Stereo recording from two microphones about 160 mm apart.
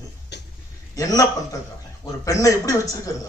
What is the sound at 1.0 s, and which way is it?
A man's voice, 20° left (ahead or behind).